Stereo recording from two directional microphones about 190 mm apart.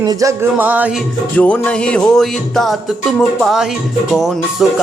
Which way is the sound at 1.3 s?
10° left (ahead or behind).